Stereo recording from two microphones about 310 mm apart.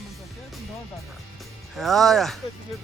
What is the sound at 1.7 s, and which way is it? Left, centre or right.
Speech, centre.